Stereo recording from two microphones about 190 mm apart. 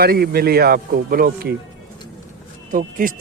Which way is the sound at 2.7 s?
50° right (ahead or behind).